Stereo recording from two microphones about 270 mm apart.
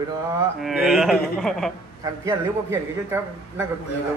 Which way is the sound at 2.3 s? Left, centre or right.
Centre.